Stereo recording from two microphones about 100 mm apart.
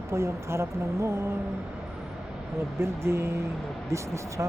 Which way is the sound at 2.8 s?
25° right (ahead or behind).